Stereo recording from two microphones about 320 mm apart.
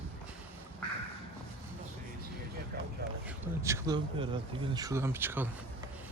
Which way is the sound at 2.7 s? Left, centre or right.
Right.